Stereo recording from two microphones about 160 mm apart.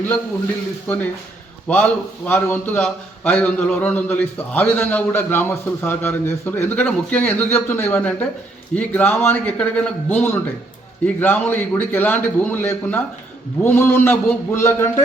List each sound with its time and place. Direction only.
1.6 s a man's voice: 10° left (ahead or behind)